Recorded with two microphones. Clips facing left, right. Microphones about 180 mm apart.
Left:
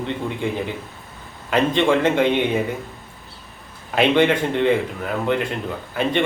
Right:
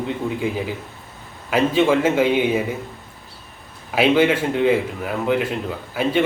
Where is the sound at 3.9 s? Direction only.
5° right (ahead or behind).